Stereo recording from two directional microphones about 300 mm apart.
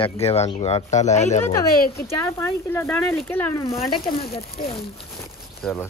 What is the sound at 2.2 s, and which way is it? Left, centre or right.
Speech, centre.